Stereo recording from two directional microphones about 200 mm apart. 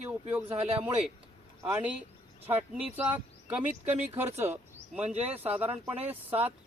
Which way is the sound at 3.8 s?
35° right (ahead or behind).